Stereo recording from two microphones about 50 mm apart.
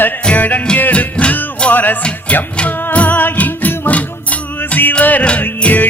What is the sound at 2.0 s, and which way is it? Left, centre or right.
Music, left.